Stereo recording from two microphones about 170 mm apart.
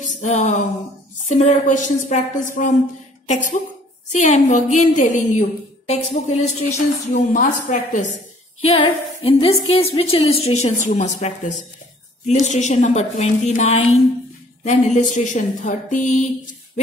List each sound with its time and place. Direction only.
0.0 s a sound: 45° left (ahead or behind)
1.3 s a woman's voice: 40° left (ahead or behind)
8.5 s a woman's voice: 30° left (ahead or behind); by 16.1 s 50° left (ahead or behind)